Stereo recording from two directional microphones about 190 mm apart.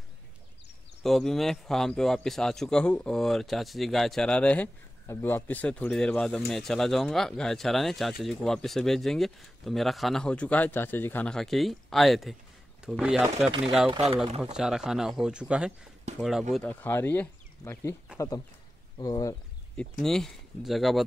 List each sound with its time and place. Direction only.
1.0 s speech: centre (ahead or behind)
13.9 s speech: 30° right (ahead or behind)
14.4 s speech: 5° right (ahead or behind)
16.5 s speech: 10° left (ahead or behind)
19.8 s speech: centre (ahead or behind)